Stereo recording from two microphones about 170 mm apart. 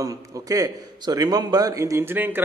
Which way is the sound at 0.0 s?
20° right (ahead or behind).